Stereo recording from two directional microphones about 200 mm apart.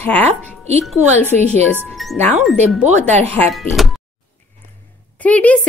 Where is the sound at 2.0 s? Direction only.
Centre (ahead or behind).